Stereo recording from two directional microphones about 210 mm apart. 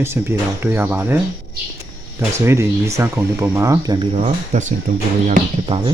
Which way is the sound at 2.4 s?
15° right (ahead or behind).